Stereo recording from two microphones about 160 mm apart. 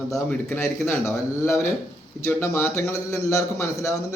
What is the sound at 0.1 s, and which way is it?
A man's voice, 10° left (ahead or behind).